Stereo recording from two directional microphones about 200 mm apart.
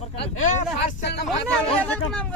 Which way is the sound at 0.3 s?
35° left (ahead or behind).